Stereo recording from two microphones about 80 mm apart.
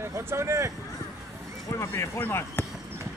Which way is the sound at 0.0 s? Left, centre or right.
Right.